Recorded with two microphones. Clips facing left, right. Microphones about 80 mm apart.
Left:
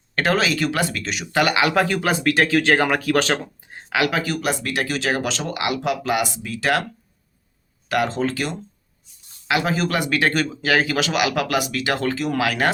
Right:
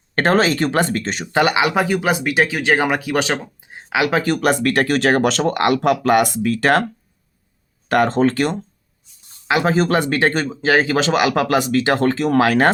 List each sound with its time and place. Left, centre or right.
0.2 s speech: right
1.4 s speech: right
4.2 s speech: right
7.9 s speech: right
9.5 s speech: right